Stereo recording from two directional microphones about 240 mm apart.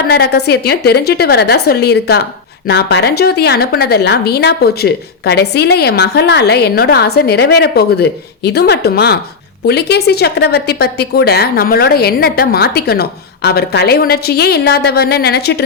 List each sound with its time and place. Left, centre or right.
0.1 s a woman's voice: left